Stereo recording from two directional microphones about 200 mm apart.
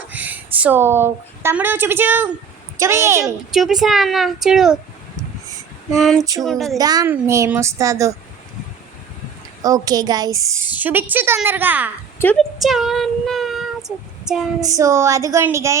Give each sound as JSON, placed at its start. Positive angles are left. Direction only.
{"t": 0.1, "sound": "a woman's voice", "side_deg": -10}
{"t": 3.5, "sound": "speech", "side_deg": 0}
{"t": 5.9, "sound": "speech", "side_deg": 0}
{"t": 6.7, "sound": "a woman's voice", "side_deg": -20}
{"t": 9.6, "sound": "a woman's voice", "side_deg": -20}
{"t": 12.2, "sound": "speech", "side_deg": 5}
{"t": 14.6, "sound": "a woman's voice", "side_deg": -15}